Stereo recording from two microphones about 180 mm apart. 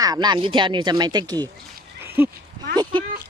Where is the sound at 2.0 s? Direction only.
10° right (ahead or behind).